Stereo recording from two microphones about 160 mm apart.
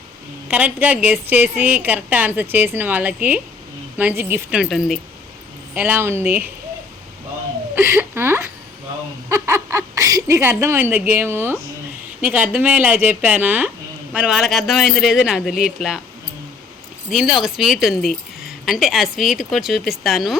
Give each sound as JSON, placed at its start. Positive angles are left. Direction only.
{"t": 0.4, "sound": "a woman's voice", "side_deg": -10}
{"t": 4.6, "sound": "speech", "side_deg": 0}
{"t": 5.7, "sound": "a woman's voice", "side_deg": -10}
{"t": 7.8, "sound": "a woman's voice", "side_deg": -15}
{"t": 17.1, "sound": "speech", "side_deg": 0}